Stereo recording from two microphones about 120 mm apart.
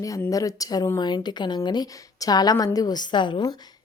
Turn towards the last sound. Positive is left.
turn(degrees=35)  # may be behind; listen again after turning